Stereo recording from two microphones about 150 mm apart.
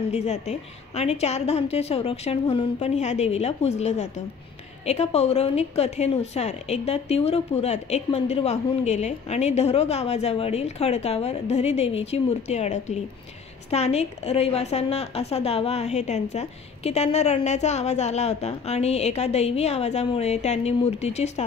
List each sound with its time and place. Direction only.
0.1 s a woman's voice: 50° left (ahead or behind)